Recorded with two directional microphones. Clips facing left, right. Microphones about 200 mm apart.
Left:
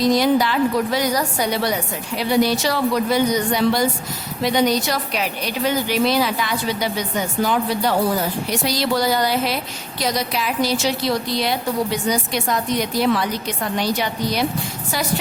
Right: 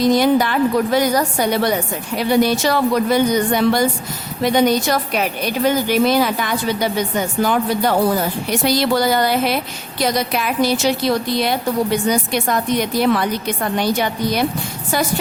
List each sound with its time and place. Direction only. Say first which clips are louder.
0.0 s a woman's voice: right 2 dB; 55° right (ahead or behind)